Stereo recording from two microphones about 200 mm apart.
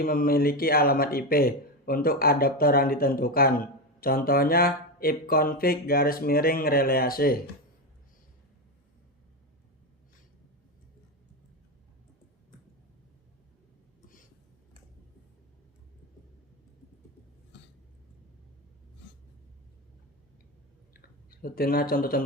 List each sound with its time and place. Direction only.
0.0 s speech: 45° left (ahead or behind)
20.9 s clicking: 45° left (ahead or behind)